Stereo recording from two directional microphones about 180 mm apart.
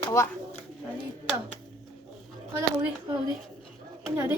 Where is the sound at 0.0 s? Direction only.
15° left (ahead or behind).